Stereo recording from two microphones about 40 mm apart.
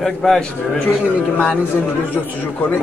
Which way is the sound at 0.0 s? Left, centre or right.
Centre.